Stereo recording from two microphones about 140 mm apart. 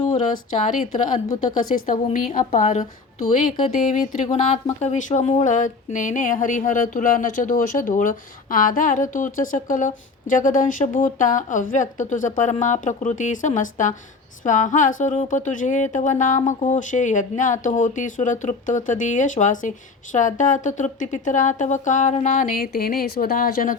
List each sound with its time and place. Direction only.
0.1 s a woman's voice: 55° left (ahead or behind)
1.7 s a woman's voice: 70° left (ahead or behind); by 23.7 s 90° left